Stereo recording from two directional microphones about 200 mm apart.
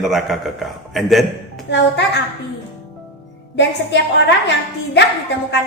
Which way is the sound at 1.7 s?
60° left (ahead or behind).